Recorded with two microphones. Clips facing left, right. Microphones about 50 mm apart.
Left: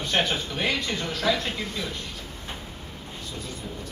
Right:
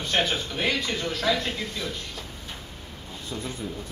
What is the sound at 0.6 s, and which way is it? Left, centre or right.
A man's voice, centre.